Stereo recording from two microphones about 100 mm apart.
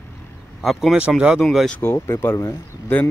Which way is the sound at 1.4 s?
5° left (ahead or behind).